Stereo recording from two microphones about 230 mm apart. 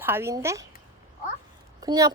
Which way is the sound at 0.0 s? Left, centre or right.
Centre.